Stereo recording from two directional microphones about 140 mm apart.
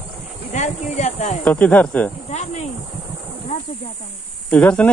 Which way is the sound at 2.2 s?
55° left (ahead or behind).